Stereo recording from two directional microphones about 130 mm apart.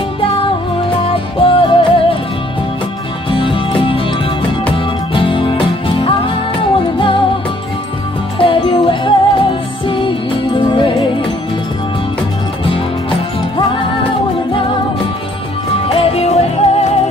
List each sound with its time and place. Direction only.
0.2 s music: 45° left (ahead or behind)
3.3 s music: 40° left (ahead or behind)
5.1 s music: 45° left (ahead or behind)
8.4 s music: 45° left (ahead or behind)
15.9 s music: 50° left (ahead or behind)